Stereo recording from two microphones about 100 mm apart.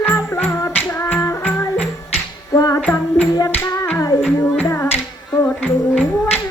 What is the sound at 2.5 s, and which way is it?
Music, 40° left (ahead or behind).